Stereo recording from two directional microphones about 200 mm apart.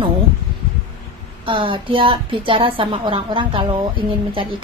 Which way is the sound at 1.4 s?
25° right (ahead or behind).